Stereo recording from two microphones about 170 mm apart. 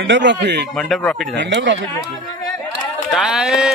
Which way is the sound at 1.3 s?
90° right.